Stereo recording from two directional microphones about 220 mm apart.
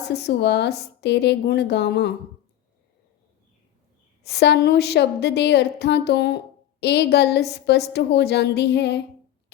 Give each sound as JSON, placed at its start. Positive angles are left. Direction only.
{"t": 0.0, "sound": "a woman's voice", "side_deg": 50}
{"t": 4.2, "sound": "a woman's voice", "side_deg": 50}